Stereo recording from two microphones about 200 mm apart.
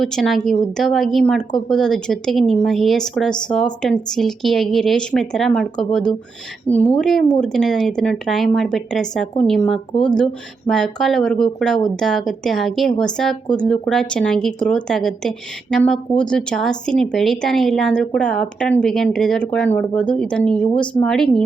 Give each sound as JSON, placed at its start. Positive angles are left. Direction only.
{"t": 0.0, "sound": "speech", "side_deg": 0}